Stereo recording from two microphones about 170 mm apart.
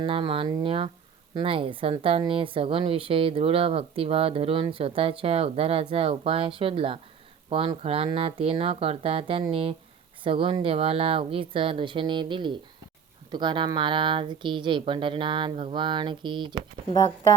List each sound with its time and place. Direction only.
0.0 s speech: 30° right (ahead or behind)